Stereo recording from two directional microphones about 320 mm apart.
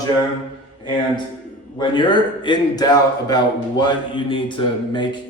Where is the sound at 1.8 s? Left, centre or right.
Centre.